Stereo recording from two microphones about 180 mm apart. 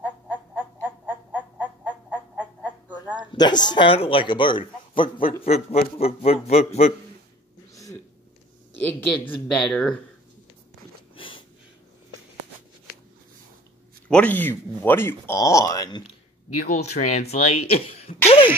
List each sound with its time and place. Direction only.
0.0 s frog: 10° right (ahead or behind)
3.2 s speech: 25° left (ahead or behind)
7.7 s a sound: 20° left (ahead or behind)
8.8 s speech: 10° left (ahead or behind)
11.1 s snort: 30° left (ahead or behind)
14.0 s speech: 10° left (ahead or behind)
16.6 s speech: 40° left (ahead or behind)